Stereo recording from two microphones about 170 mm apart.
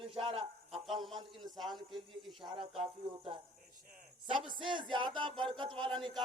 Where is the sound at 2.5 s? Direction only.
30° right (ahead or behind).